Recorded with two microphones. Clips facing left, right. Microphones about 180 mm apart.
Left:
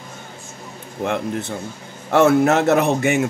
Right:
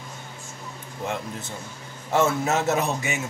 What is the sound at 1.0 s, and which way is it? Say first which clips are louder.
A man's voice: left 8 dB; 65° left (ahead or behind).